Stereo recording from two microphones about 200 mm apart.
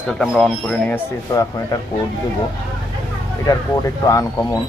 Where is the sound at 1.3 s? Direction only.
20° left (ahead or behind).